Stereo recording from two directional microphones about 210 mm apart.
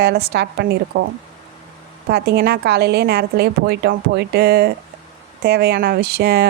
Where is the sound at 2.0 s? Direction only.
50° right (ahead or behind).